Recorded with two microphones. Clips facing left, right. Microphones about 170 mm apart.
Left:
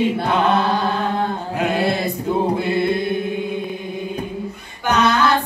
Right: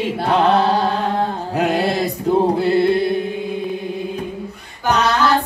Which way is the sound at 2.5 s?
35° right (ahead or behind).